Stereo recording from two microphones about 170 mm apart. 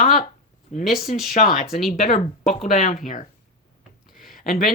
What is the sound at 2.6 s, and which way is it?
Speech, 50° left (ahead or behind).